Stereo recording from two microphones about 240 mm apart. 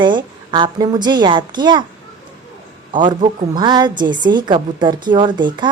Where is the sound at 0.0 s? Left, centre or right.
Centre.